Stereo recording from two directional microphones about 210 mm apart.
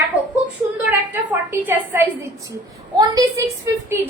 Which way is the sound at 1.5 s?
10° right (ahead or behind).